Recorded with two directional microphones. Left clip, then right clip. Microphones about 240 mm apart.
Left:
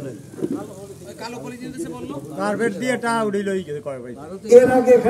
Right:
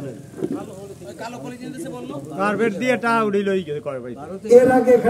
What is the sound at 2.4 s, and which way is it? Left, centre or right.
A man's voice, right.